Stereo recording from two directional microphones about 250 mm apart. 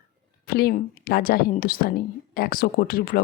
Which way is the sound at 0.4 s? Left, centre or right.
Left.